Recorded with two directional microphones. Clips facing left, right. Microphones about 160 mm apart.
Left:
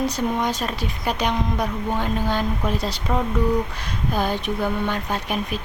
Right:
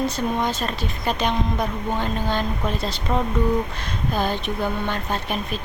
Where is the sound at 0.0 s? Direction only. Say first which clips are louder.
Even; 10° left (ahead or behind).